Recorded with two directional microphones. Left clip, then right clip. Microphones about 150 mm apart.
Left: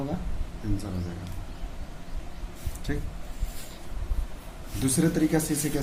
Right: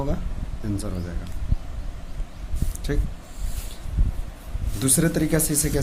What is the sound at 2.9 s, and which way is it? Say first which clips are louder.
Speech: right 5 dB; 65° right (ahead or behind).